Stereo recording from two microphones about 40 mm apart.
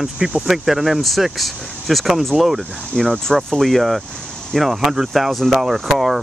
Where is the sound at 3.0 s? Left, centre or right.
Centre.